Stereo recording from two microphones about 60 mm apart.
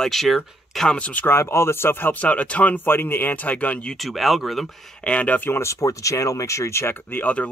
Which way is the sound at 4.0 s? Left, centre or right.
Centre.